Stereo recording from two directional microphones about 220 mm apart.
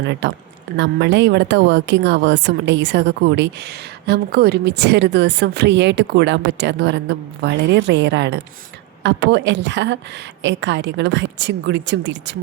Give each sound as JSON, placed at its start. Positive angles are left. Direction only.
{"t": 0.1, "sound": "a woman's voice", "side_deg": -55}